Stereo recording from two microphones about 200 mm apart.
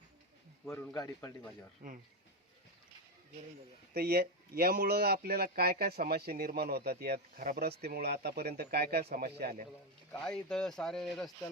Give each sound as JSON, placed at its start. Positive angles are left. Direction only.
{"t": 0.7, "sound": "speech", "side_deg": 10}
{"t": 1.8, "sound": "speech", "side_deg": -45}
{"t": 3.9, "sound": "speech", "side_deg": -50}
{"t": 10.1, "sound": "speech", "side_deg": 5}